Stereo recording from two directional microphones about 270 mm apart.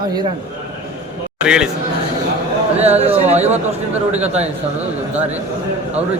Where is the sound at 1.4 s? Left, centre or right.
Centre.